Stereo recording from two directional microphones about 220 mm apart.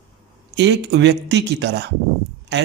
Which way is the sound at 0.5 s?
50° right (ahead or behind).